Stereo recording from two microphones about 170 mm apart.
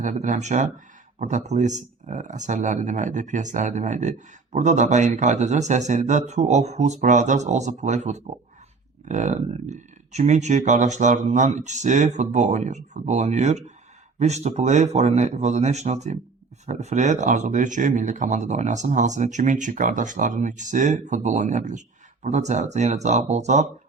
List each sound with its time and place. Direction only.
0.0 s speech: 45° right (ahead or behind)